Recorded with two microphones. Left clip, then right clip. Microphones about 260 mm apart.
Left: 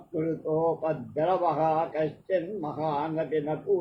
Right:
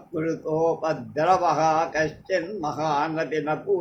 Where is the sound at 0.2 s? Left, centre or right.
Right.